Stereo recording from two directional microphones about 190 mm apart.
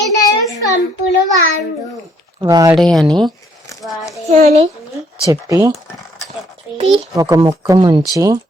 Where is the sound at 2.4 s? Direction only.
20° right (ahead or behind).